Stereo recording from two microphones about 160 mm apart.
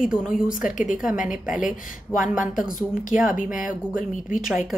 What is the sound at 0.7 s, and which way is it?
Speech, 55° left (ahead or behind).